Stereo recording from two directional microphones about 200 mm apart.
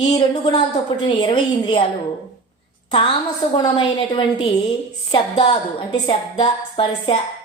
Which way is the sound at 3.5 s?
20° left (ahead or behind).